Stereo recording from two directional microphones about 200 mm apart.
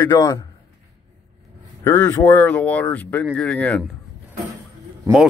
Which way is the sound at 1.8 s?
10° left (ahead or behind).